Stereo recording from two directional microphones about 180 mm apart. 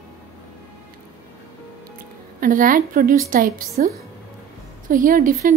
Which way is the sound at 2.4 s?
50° right (ahead or behind).